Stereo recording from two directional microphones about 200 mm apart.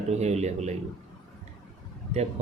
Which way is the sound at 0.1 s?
35° right (ahead or behind).